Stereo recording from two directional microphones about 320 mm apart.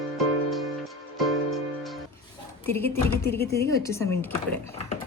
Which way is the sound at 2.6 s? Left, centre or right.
Centre.